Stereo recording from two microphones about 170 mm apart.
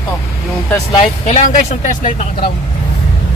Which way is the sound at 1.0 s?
45° left (ahead or behind).